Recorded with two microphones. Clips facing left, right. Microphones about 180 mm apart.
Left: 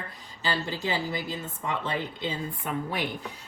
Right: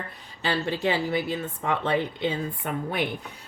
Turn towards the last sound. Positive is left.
turn(degrees=-65)  # may be behind; listen again after turning